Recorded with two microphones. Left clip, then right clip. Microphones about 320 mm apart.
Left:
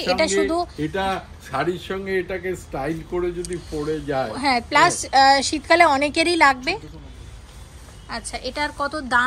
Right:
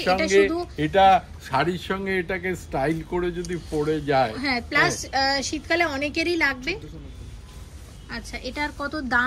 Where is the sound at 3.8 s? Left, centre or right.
Centre.